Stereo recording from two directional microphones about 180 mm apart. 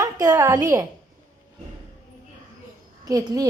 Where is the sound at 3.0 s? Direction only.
20° right (ahead or behind).